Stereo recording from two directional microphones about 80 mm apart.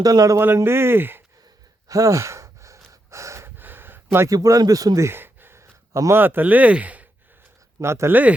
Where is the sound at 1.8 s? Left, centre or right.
Right.